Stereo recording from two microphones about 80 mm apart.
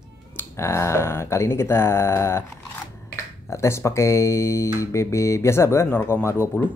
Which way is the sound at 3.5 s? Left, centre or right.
Left.